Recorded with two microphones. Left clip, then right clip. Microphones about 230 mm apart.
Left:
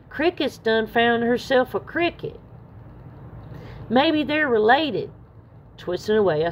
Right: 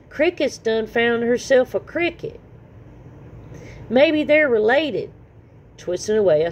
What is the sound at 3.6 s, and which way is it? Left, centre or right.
Speech, centre.